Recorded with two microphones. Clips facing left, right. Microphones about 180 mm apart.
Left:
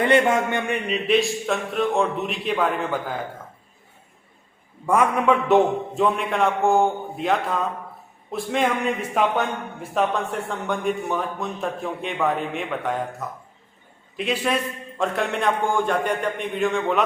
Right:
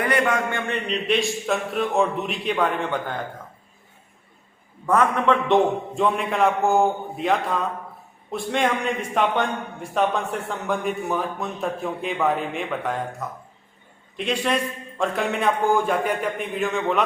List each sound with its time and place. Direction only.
0.0 s a man's voice: 25° left (ahead or behind)
0.7 s a man's voice: 5° left (ahead or behind)
4.9 s a man's voice: 10° left (ahead or behind)